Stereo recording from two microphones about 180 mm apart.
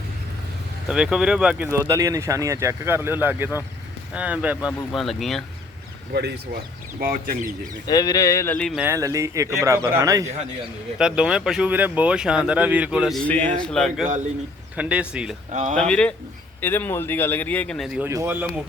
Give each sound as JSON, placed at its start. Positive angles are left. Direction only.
{"t": 0.9, "sound": "speech", "side_deg": -5}
{"t": 6.1, "sound": "speech", "side_deg": -60}
{"t": 7.9, "sound": "speech", "side_deg": 20}
{"t": 8.5, "sound": "speech", "side_deg": 5}
{"t": 8.8, "sound": "speech", "side_deg": -15}
{"t": 10.9, "sound": "speech", "side_deg": -5}
{"t": 15.7, "sound": "speech", "side_deg": 5}
{"t": 18.0, "sound": "speech", "side_deg": -15}